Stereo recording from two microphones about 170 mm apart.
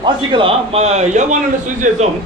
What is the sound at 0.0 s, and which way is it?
A man's voice, 30° right (ahead or behind).